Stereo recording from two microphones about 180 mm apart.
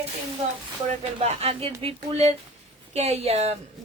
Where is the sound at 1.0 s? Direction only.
35° right (ahead or behind).